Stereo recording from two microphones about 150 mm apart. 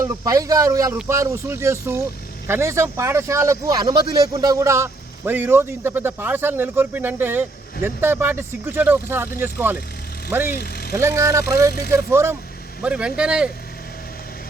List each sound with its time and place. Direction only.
0.0 s speech: 20° right (ahead or behind)
12.8 s speech: 5° right (ahead or behind)